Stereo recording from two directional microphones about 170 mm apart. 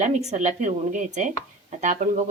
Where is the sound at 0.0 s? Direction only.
40° right (ahead or behind).